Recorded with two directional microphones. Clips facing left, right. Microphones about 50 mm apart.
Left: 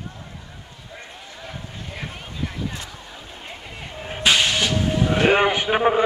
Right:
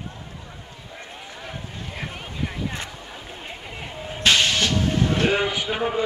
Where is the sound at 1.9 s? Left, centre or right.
Centre.